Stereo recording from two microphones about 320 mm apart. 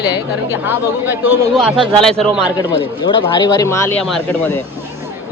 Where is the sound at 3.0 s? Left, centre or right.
Centre.